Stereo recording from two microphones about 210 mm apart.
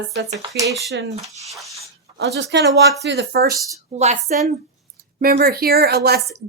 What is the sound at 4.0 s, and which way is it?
Speech, 30° right (ahead or behind).